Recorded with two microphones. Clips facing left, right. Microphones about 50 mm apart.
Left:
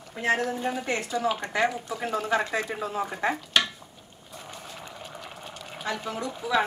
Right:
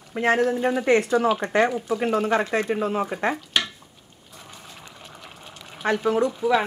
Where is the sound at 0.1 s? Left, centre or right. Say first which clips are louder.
Right 5 dB; right.